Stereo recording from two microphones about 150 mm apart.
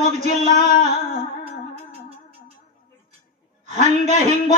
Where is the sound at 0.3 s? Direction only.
50° right (ahead or behind).